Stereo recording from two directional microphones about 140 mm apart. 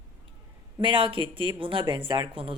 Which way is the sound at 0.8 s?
35° right (ahead or behind).